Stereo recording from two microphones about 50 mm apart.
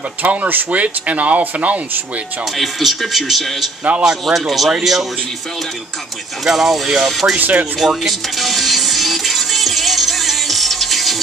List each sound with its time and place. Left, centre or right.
0.2 s speech: right
2.5 s speech: centre
6.4 s speech: centre
7.3 s speech: right
7.8 s music: centre